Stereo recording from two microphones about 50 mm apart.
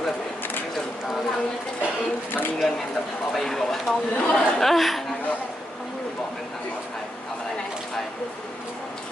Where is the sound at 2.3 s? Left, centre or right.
Left.